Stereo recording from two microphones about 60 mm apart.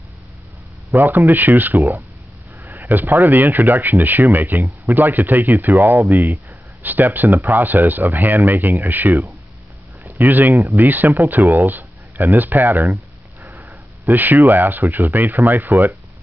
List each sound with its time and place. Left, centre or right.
0.9 s speech: right
5.9 s speech: right
6.8 s speech: right
10.1 s speech: right